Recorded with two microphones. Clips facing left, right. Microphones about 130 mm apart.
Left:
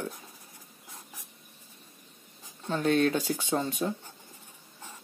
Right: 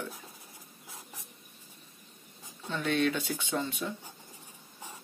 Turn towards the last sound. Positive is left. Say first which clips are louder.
# left 4 dB
turn(degrees=40)  # may be behind; listen again after turning